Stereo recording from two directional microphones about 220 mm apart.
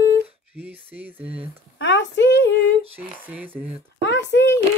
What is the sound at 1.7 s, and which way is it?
Speech, 55° left (ahead or behind).